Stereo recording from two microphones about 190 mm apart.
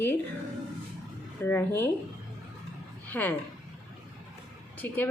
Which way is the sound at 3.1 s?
10° left (ahead or behind).